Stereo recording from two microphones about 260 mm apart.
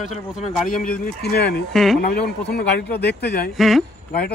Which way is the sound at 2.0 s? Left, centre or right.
Left.